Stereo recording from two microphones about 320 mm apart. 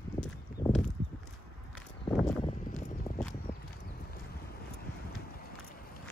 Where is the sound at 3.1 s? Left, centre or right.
Left.